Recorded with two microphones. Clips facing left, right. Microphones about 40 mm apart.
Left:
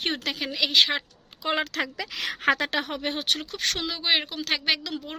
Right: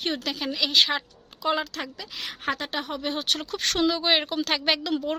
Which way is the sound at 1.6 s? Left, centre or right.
Left.